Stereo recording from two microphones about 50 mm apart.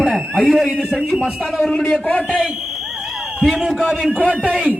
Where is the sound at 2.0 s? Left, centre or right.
Left.